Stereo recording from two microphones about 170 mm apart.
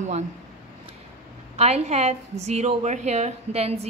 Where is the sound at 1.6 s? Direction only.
40° right (ahead or behind).